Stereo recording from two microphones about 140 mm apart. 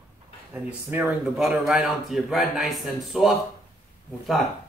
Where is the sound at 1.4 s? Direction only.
5° right (ahead or behind).